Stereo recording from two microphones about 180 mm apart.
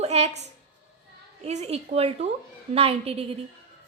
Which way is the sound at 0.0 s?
35° right (ahead or behind).